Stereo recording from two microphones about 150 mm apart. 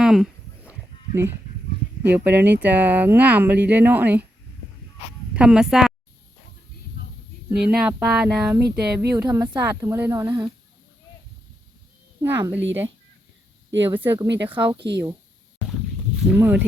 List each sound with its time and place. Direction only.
0.0 s a sound: 5° right (ahead or behind)
2.0 s speech: 10° right (ahead or behind)
5.3 s speech: 5° right (ahead or behind)
7.0 s a sound: 70° left (ahead or behind)
7.7 s speech: 5° right (ahead or behind); by 10.5 s 20° right (ahead or behind)
12.2 s speech: 15° right (ahead or behind)
14.6 s speech: 30° right (ahead or behind)
16.2 s speech: 10° right (ahead or behind)